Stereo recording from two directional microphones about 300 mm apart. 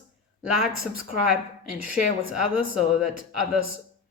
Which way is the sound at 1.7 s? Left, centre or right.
Centre.